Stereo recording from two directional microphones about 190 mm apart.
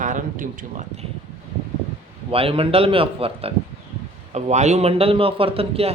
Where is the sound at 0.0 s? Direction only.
45° right (ahead or behind).